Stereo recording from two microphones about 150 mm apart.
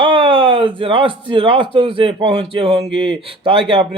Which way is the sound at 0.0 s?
35° right (ahead or behind).